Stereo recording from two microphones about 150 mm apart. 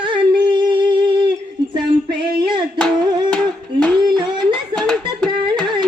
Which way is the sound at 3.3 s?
10° left (ahead or behind).